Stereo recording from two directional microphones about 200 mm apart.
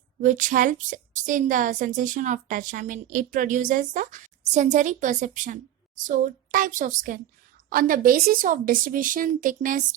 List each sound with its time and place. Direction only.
0.2 s a woman's voice: 40° right (ahead or behind)